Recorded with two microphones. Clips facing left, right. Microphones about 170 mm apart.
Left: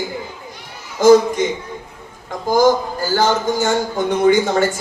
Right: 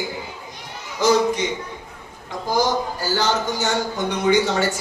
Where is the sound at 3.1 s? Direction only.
50° left (ahead or behind).